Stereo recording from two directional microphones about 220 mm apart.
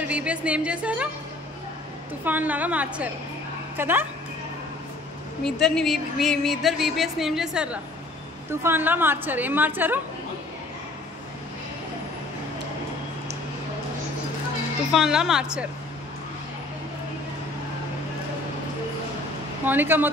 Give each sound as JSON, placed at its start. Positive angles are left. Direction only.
{"t": 0.1, "sound": "a woman's voice", "side_deg": -5}
{"t": 2.2, "sound": "a woman's voice", "side_deg": -10}
{"t": 5.4, "sound": "a woman's voice", "side_deg": 0}
{"t": 14.9, "sound": "a woman's voice", "side_deg": 0}
{"t": 19.6, "sound": "a woman's voice", "side_deg": -10}